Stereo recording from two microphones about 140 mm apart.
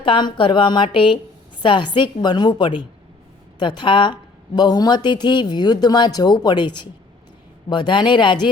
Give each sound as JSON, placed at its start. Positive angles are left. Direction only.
{"t": 0.0, "sound": "a woman's voice", "side_deg": 35}